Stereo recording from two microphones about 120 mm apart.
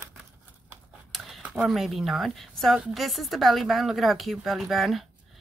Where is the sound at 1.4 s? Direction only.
10° right (ahead or behind).